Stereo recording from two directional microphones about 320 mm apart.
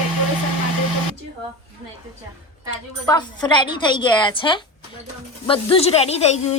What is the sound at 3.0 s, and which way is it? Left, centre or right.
A woman's voice, centre.